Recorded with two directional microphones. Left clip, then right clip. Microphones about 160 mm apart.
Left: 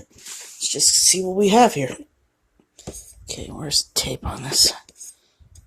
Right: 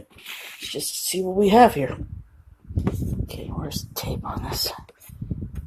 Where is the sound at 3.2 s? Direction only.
15° left (ahead or behind).